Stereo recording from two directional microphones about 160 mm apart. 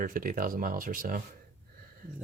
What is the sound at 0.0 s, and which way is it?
Speech, 60° right (ahead or behind).